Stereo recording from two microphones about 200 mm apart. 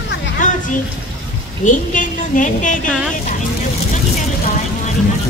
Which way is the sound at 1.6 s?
40° left (ahead or behind).